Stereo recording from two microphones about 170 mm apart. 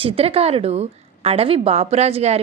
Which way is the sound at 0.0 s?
35° right (ahead or behind).